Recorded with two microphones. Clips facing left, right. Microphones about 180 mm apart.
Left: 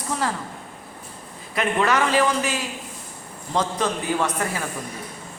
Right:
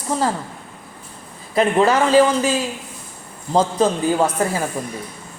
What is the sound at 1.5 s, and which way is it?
A man's voice, 30° right (ahead or behind).